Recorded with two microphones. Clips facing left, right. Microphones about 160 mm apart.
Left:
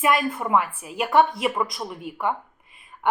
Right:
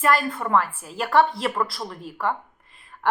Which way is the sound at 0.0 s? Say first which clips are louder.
Even; 5° left (ahead or behind).